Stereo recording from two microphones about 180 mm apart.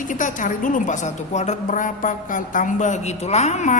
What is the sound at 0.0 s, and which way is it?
A woman's voice, 45° left (ahead or behind).